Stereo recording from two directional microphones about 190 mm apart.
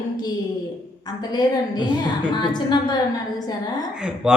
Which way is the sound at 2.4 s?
25° left (ahead or behind).